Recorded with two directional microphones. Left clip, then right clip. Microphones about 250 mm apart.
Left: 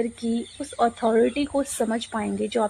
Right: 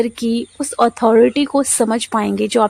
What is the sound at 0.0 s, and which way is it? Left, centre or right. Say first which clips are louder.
A woman's voice: right 8 dB; right.